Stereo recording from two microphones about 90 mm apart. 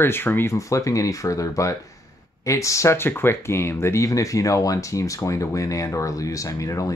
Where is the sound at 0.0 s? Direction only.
25° left (ahead or behind).